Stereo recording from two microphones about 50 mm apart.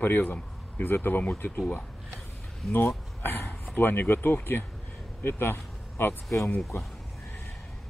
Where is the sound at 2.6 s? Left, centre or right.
Centre.